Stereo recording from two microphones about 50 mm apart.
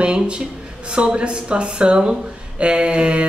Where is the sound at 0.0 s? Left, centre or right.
Centre.